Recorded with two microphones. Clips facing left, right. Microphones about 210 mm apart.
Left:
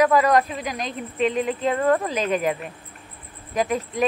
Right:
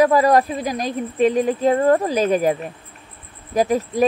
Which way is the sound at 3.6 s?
35° right (ahead or behind).